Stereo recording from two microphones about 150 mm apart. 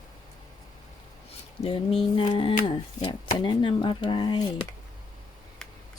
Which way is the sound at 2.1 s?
35° left (ahead or behind).